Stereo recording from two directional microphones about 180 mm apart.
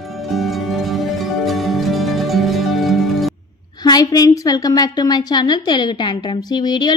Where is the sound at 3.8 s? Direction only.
20° left (ahead or behind).